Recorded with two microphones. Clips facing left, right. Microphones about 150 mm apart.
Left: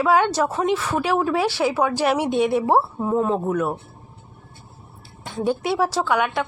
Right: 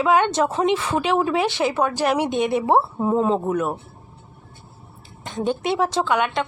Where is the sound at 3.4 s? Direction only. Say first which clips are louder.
Even; 5° right (ahead or behind).